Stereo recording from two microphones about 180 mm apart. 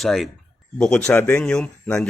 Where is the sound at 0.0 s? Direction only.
Centre (ahead or behind).